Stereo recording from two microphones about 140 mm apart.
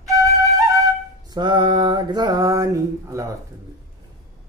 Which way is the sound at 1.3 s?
35° right (ahead or behind).